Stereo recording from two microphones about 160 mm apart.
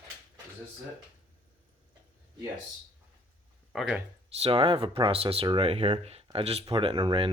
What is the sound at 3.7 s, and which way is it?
Speech, 5° right (ahead or behind).